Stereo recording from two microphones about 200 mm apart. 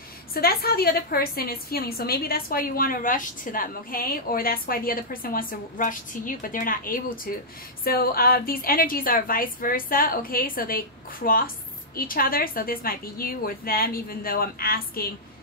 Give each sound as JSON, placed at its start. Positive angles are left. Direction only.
{"t": 0.3, "sound": "a woman's voice", "side_deg": 50}